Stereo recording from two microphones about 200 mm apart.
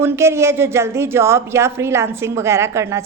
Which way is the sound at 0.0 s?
15° right (ahead or behind).